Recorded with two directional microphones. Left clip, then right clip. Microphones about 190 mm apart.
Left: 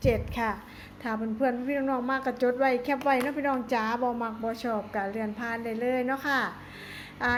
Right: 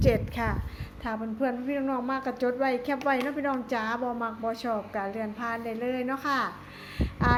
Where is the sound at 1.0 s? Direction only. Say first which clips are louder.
Left 2 dB; 5° left (ahead or behind).